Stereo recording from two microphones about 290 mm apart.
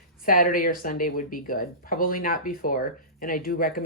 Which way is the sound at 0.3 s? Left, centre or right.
Left.